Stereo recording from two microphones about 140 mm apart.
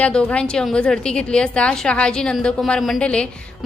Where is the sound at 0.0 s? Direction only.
10° left (ahead or behind).